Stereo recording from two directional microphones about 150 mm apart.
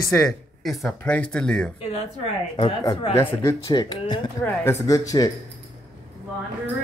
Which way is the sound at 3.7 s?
30° left (ahead or behind).